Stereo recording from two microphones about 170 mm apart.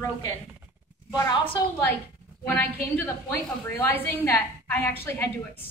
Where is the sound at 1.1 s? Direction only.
20° left (ahead or behind).